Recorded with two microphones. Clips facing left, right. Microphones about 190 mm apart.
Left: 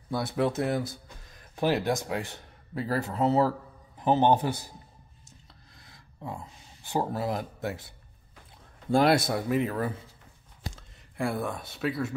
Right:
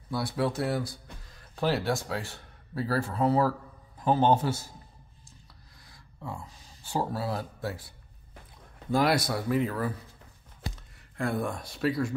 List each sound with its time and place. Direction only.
0.1 s a man's voice: 20° left (ahead or behind)
6.2 s speech: 20° left (ahead or behind)
8.9 s speech: 25° left (ahead or behind)
11.1 s speech: 5° left (ahead or behind)